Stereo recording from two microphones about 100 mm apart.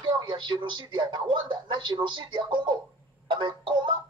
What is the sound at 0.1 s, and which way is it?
Speech, 50° right (ahead or behind).